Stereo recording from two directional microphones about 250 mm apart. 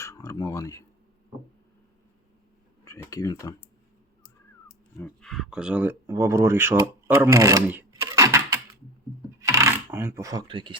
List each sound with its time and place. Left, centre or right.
0.0 s speech: centre
2.8 s speech: centre
4.9 s speech: centre
9.4 s a sound: centre